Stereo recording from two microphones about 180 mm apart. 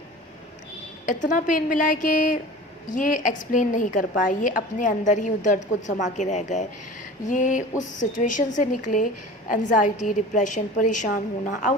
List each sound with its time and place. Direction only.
1.0 s a woman's voice: 45° left (ahead or behind)